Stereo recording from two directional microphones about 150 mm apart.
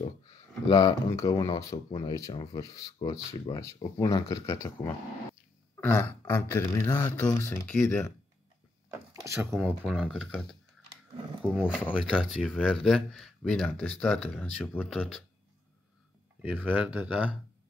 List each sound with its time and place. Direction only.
0.7 s speech: 25° left (ahead or behind)
4.5 s speech: 20° left (ahead or behind)
9.1 s speech: 20° right (ahead or behind)
9.8 s speech: centre (ahead or behind)
11.6 s speech: 10° left (ahead or behind)
11.9 s speech: 5° right (ahead or behind)
16.6 s speech: 10° right (ahead or behind)